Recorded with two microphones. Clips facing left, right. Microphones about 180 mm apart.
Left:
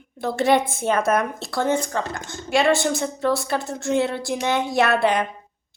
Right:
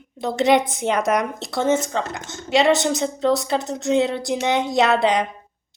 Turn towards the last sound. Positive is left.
turn(degrees=-20)  # may be behind; listen again after turning